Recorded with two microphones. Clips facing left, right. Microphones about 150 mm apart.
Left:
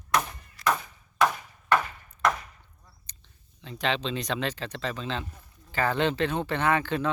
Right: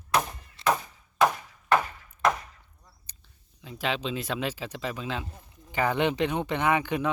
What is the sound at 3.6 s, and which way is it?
Speech, 5° right (ahead or behind).